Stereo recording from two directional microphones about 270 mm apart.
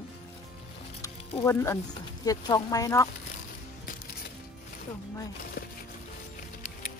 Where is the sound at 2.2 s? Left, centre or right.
Centre.